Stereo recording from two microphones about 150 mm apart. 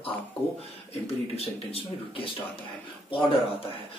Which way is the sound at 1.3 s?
40° left (ahead or behind).